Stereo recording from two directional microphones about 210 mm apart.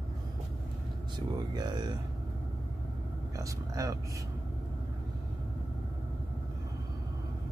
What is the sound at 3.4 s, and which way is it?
Speech, 15° right (ahead or behind).